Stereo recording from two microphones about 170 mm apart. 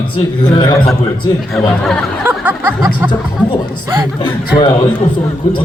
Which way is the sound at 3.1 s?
30° left (ahead or behind).